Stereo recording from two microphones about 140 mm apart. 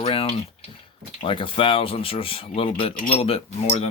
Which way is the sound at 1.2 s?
40° left (ahead or behind).